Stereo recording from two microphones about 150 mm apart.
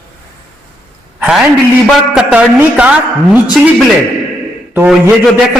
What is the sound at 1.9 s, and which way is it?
A man's voice, 10° right (ahead or behind).